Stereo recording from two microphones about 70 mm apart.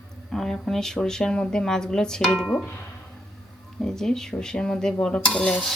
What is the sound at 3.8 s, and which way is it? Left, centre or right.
Speech, centre.